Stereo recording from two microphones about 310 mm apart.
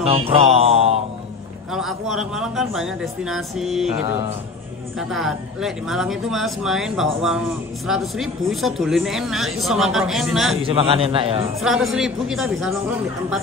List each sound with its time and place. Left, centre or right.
0.4 s a sound: centre
1.7 s speech: centre
4.9 s speech: centre
10.6 s a man's voice: centre
11.6 s speech: centre